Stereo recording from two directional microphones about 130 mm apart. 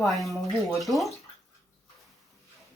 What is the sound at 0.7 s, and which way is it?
Speech, centre (ahead or behind).